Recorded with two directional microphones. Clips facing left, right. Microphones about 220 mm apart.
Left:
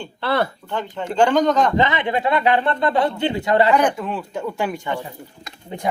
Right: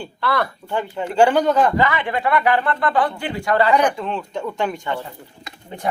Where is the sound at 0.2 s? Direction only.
25° left (ahead or behind).